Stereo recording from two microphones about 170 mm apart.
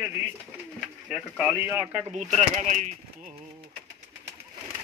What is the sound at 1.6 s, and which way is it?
Speech, 10° right (ahead or behind).